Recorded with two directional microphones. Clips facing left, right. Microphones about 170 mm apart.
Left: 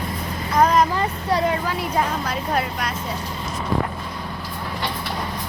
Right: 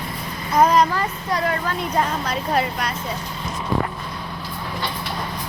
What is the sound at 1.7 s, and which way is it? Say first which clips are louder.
A woman's voice: even; 5° left (ahead or behind).